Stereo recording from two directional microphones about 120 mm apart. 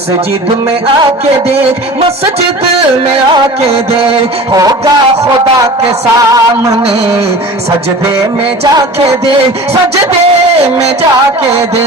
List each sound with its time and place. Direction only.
6.3 s music: 30° right (ahead or behind)